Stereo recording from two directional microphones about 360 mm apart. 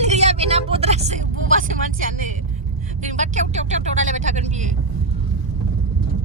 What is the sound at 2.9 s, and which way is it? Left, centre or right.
Vehicle, centre.